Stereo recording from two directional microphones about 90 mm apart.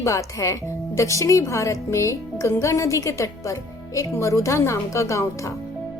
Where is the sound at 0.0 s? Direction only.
35° left (ahead or behind).